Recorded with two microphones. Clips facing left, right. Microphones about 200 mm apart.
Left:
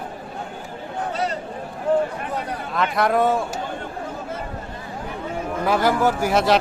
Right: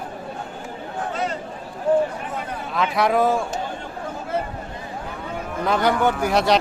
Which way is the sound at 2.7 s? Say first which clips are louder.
Even; centre (ahead or behind).